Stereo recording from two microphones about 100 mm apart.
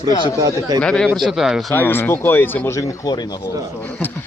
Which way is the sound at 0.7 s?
10° left (ahead or behind).